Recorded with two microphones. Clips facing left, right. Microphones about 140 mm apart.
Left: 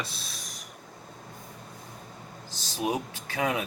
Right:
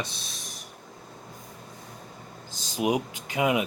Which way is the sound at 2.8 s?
15° right (ahead or behind).